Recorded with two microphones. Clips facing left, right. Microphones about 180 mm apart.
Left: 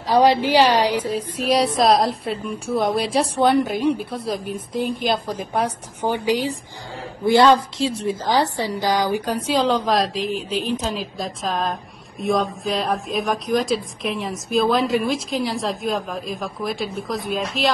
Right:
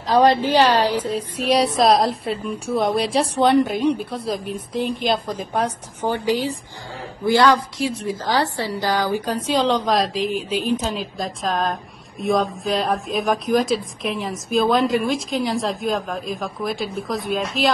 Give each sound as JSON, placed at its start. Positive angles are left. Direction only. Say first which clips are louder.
{"t": 0.1, "sound": "a woman's voice", "louder": "even", "side_deg": 10}
{"t": 1.3, "sound": "speech", "louder": "right 1 dB", "side_deg": 0}
{"t": 5.6, "sound": "a woman's voice", "louder": "even", "side_deg": 15}